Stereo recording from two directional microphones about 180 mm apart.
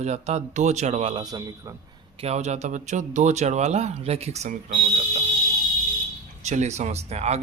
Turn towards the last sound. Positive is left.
turn(degrees=-35)  # may be behind; listen again after turning